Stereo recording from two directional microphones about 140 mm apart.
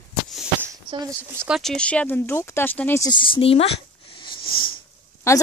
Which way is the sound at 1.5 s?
5° left (ahead or behind).